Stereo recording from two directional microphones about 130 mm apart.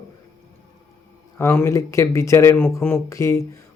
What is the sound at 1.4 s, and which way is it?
Speech, 20° left (ahead or behind).